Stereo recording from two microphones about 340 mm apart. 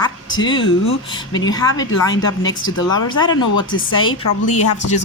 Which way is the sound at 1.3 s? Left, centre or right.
Centre.